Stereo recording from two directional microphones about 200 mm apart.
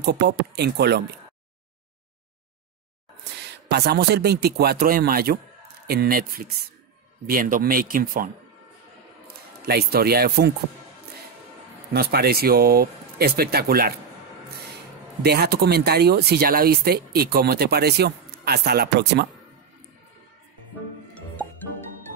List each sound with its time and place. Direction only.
0.0 s speech: 55° right (ahead or behind)
3.3 s speech: 55° right (ahead or behind)
9.6 s speech: 50° right (ahead or behind)
11.9 s speech: 50° right (ahead or behind)
15.2 s speech: 55° right (ahead or behind)